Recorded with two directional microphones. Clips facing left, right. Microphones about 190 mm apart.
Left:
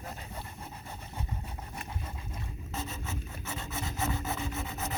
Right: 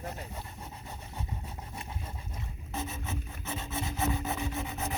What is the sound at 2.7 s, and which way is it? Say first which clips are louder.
Rub: right 2 dB; 15° right (ahead or behind).